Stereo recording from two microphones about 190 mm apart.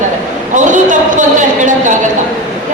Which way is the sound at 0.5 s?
40° right (ahead or behind).